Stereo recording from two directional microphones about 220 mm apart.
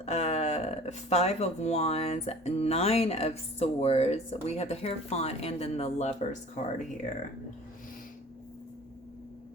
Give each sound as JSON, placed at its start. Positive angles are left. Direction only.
{"t": 0.0, "sound": "speech", "side_deg": 30}